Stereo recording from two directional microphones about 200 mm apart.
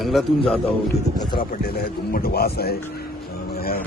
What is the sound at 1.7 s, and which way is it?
Speech, 50° left (ahead or behind).